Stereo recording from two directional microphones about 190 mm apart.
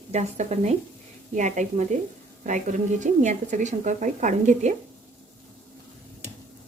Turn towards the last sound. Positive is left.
turn(degrees=-40)  # may be behind; listen again after turning